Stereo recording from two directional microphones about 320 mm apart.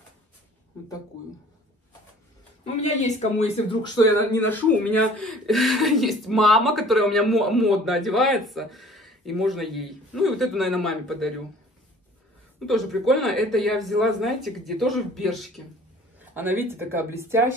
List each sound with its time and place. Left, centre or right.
2.6 s speech: left; by 11.3 s centre
12.5 s speech: centre